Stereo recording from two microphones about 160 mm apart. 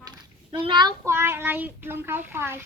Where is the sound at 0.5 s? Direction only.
30° right (ahead or behind); by 2.6 s 15° right (ahead or behind).